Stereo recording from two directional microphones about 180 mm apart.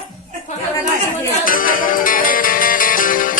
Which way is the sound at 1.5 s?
50° left (ahead or behind).